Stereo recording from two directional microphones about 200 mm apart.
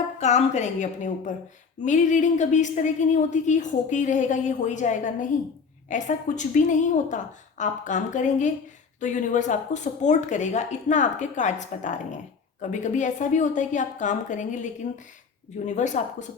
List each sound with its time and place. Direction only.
0.2 s a woman's voice: 35° left (ahead or behind)